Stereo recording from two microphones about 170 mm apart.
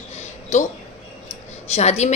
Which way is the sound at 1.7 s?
40° left (ahead or behind).